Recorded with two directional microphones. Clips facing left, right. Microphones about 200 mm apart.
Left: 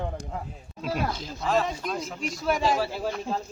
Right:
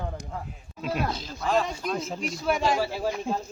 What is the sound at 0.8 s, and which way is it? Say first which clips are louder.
A man's voice: even; centre (ahead or behind).